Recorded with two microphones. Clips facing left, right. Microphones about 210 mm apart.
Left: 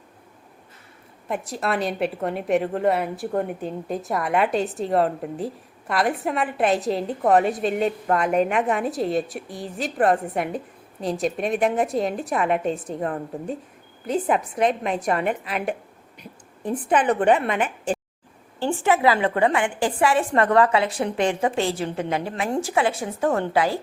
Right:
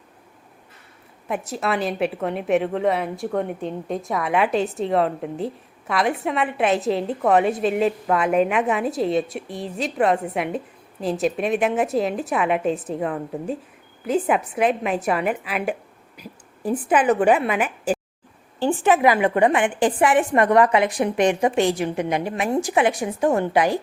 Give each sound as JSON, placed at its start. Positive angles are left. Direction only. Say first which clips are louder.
{"t": 1.3, "sound": "a woman's voice", "louder": "right 1 dB", "side_deg": 0}
{"t": 14.1, "sound": "a woman's voice", "louder": "right 2 dB", "side_deg": -5}